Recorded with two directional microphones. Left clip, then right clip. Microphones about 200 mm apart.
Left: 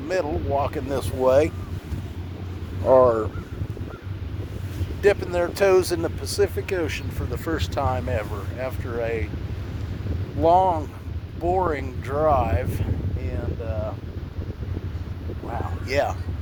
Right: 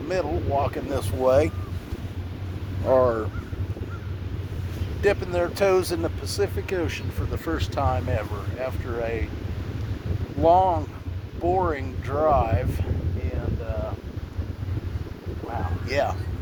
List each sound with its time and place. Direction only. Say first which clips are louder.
0.1 s speech: left 1 dB; 50° left (ahead or behind)
2.8 s speech: left 4 dB; 30° left (ahead or behind)
5.0 s speech: left 2 dB; 50° left (ahead or behind)
10.4 s speech: even; 50° left (ahead or behind)
15.9 s speech: left 1 dB; 50° left (ahead or behind)